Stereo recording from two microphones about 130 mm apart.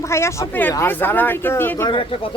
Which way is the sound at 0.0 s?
20° left (ahead or behind).